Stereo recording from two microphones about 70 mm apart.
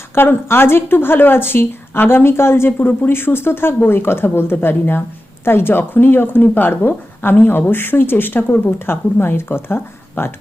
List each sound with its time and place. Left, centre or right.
0.1 s speech: left